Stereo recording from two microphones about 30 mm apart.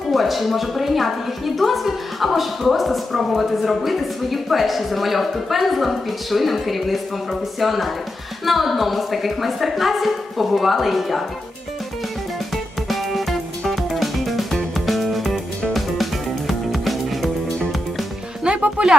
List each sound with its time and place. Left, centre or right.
0.1 s a woman's voice: centre
12.9 s music: centre
16.5 s music: centre
18.5 s music: right